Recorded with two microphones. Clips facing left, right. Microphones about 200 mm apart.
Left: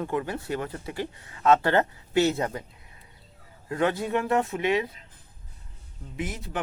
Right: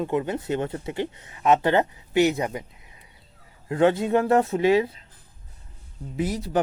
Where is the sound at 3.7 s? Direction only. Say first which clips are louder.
Right 6 dB; 25° right (ahead or behind).